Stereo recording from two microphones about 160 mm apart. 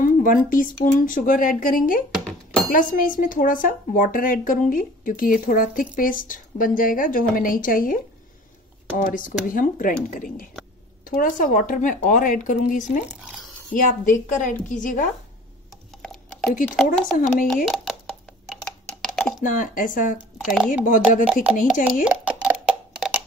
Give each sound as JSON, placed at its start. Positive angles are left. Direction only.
{"t": 0.0, "sound": "speech", "side_deg": 60}
{"t": 2.1, "sound": "dishes", "side_deg": 5}
{"t": 2.7, "sound": "a woman's voice", "side_deg": 55}
{"t": 13.0, "sound": "speech", "side_deg": -5}
{"t": 13.7, "sound": "a woman's voice", "side_deg": 55}
{"t": 15.9, "sound": "a sound", "side_deg": 5}
{"t": 16.6, "sound": "speech", "side_deg": 5}
{"t": 17.6, "sound": "a sound", "side_deg": 0}
{"t": 19.4, "sound": "speech", "side_deg": 55}
{"t": 20.4, "sound": "speech", "side_deg": -5}
{"t": 20.8, "sound": "speech", "side_deg": 55}
{"t": 22.0, "sound": "a sound", "side_deg": -10}